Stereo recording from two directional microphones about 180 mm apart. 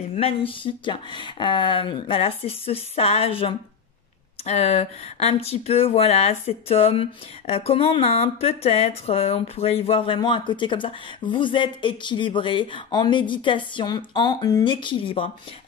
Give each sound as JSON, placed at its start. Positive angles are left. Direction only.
{"t": 0.1, "sound": "speech", "side_deg": 35}